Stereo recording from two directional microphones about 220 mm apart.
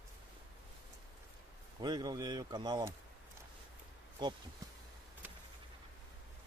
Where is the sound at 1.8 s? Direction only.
20° right (ahead or behind).